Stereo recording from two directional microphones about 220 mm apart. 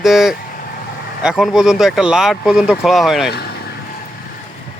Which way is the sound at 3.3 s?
45° left (ahead or behind).